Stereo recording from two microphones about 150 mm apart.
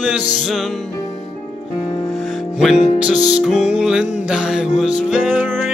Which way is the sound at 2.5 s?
5° right (ahead or behind).